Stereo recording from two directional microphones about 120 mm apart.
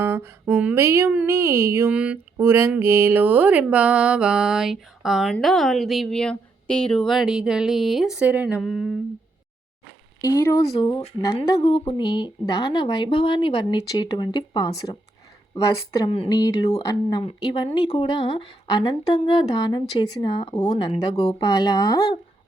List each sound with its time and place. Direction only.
0.0 s speech: 20° right (ahead or behind)
1.9 s speech: 10° right (ahead or behind)
8.6 s speech: centre (ahead or behind)
10.2 s a woman's voice: 25° left (ahead or behind)
16.0 s speech: 50° left (ahead or behind)
16.3 s speech: 35° left (ahead or behind)